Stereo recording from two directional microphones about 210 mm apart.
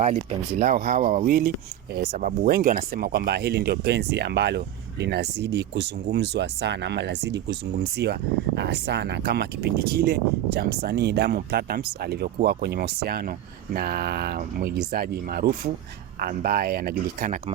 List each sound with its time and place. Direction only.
0.0 s speech: 30° right (ahead or behind); by 16.9 s 45° right (ahead or behind)